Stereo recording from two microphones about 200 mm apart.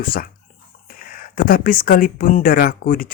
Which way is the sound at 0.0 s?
45° left (ahead or behind).